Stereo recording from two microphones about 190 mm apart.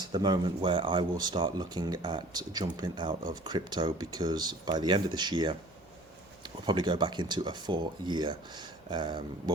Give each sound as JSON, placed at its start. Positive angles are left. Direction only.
{"t": 0.0, "sound": "speech", "side_deg": -20}
{"t": 6.7, "sound": "speech", "side_deg": -25}